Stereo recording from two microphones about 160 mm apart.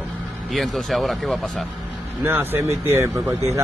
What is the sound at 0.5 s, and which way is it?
Speech, centre (ahead or behind).